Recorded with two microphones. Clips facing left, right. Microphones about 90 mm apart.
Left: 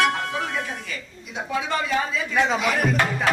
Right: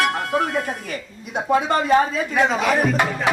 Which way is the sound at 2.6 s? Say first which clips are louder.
Right 4 dB; 40° right (ahead or behind).